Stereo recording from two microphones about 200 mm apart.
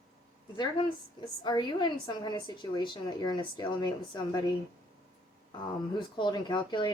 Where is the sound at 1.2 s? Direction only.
20° left (ahead or behind).